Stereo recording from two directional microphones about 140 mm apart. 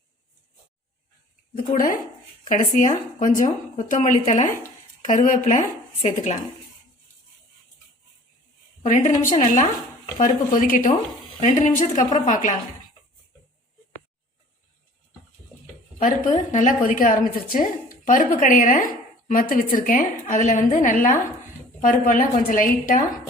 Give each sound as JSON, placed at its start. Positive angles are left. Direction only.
{"t": 1.7, "sound": "speech", "side_deg": 90}
{"t": 2.5, "sound": "a woman's voice", "side_deg": 70}
{"t": 8.8, "sound": "a woman's voice", "side_deg": 65}
{"t": 11.3, "sound": "speech", "side_deg": 60}
{"t": 16.0, "sound": "a woman's voice", "side_deg": 65}